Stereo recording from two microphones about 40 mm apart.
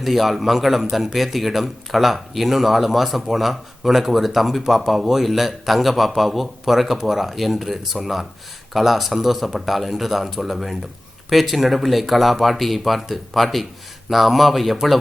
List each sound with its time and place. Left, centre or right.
0.0 s speech: centre